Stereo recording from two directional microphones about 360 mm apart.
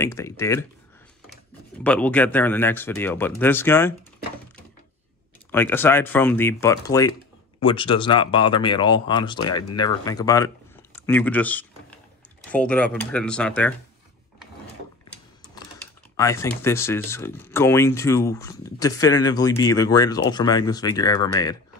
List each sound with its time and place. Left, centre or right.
0.0 s speech: centre
1.8 s speech: centre
5.5 s speech: centre
16.2 s speech: centre